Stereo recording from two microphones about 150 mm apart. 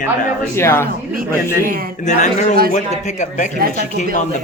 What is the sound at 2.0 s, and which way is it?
Speech, 50° left (ahead or behind).